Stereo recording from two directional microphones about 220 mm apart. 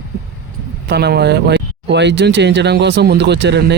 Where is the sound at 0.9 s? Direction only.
50° right (ahead or behind).